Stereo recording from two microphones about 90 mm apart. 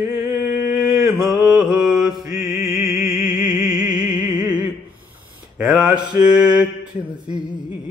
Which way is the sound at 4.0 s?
10° right (ahead or behind).